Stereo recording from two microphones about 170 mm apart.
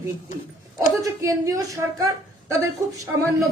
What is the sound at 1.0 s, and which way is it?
A woman's voice, 20° right (ahead or behind).